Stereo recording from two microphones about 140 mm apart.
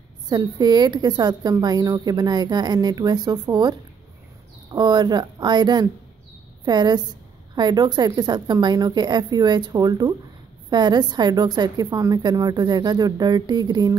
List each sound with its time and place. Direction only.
0.3 s a woman's voice: 30° right (ahead or behind)